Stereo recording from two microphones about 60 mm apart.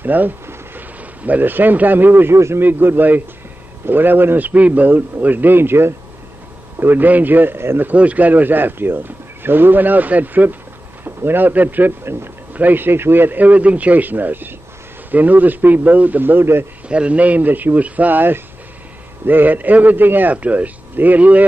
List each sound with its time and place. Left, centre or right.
0.0 s speech: right
2.3 s a man's voice: right
2.6 s speech: right
7.9 s speech: right
12.5 s speech: right
16.9 s a man's voice: right